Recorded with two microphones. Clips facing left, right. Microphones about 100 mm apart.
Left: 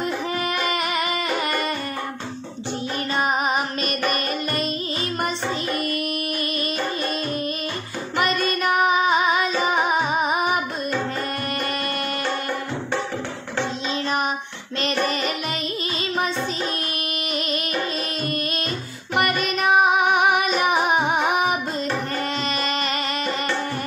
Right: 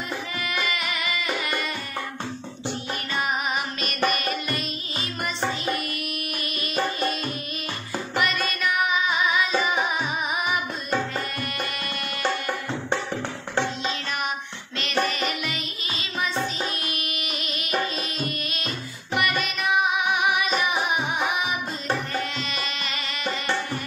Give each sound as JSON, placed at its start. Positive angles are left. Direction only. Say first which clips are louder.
{"t": 0.4, "sound": "music", "louder": "left 2 dB", "side_deg": 40}
{"t": 3.2, "sound": "music", "louder": "left 5 dB", "side_deg": 35}
{"t": 8.2, "sound": "music", "louder": "left 4 dB", "side_deg": 40}
{"t": 14.8, "sound": "music", "louder": "left 2 dB", "side_deg": 35}
{"t": 19.1, "sound": "music", "louder": "left 4 dB", "side_deg": 45}
{"t": 22.6, "sound": "music", "louder": "left 7 dB", "side_deg": 45}